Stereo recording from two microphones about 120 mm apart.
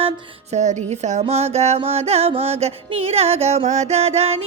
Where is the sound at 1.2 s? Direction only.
60° right (ahead or behind).